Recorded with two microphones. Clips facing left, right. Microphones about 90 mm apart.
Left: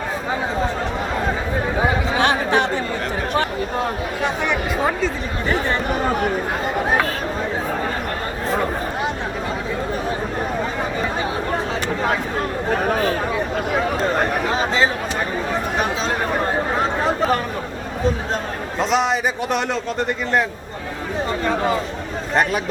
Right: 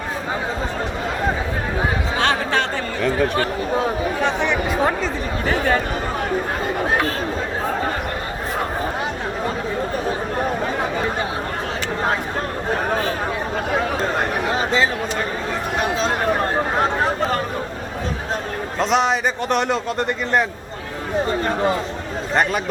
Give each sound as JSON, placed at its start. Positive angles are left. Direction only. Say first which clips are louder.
{"t": 2.1, "sound": "chatter", "louder": "left 1 dB", "side_deg": 15}
{"t": 18.8, "sound": "a man's voice", "louder": "right 1 dB", "side_deg": 0}